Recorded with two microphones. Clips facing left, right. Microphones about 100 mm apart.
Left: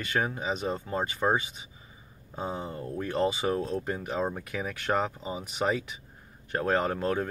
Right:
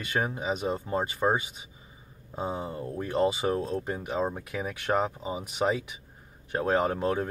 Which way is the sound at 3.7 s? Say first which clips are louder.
Right 1 dB; 15° right (ahead or behind).